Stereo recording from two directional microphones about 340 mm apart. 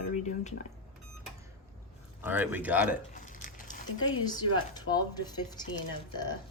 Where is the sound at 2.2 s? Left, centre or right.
Centre.